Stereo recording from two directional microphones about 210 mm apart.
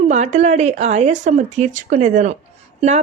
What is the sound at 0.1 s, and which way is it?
Speech, 35° right (ahead or behind).